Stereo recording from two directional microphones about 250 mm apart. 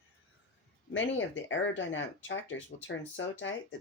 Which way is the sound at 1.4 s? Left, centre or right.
Left.